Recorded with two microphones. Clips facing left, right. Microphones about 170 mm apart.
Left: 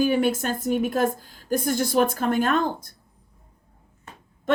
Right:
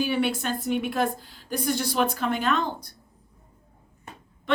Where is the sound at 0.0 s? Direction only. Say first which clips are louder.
Left 4 dB; 45° left (ahead or behind).